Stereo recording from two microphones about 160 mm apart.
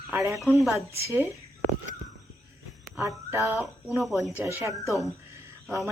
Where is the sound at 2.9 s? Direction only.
15° right (ahead or behind).